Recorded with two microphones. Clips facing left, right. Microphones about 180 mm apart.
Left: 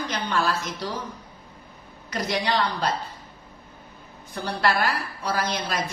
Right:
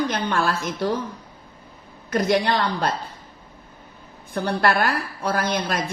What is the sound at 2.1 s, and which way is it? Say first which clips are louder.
Speech: right 6 dB; 50° right (ahead or behind).